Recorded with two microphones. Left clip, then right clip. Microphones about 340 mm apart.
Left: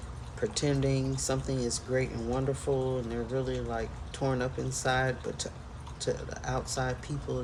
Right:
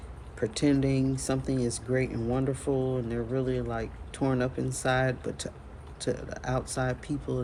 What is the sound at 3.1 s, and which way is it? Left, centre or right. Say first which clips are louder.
Speech: right 2 dB; right.